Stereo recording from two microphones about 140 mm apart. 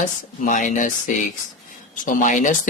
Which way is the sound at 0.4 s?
70° left (ahead or behind).